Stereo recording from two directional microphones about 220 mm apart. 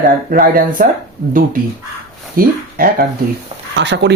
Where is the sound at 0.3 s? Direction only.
40° right (ahead or behind).